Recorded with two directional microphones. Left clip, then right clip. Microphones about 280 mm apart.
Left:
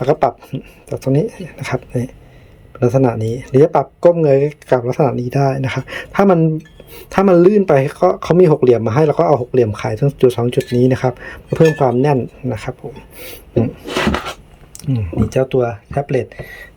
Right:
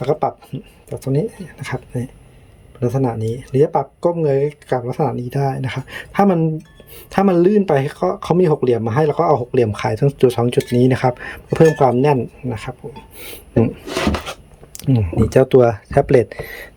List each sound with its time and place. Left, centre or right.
0.0 s speech: centre
14.8 s speech: centre